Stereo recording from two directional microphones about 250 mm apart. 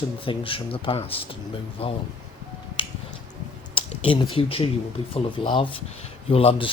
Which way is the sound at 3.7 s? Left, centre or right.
Left.